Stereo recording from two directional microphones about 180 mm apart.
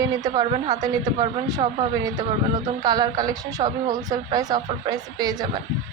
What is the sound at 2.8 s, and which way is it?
Speech, 20° right (ahead or behind).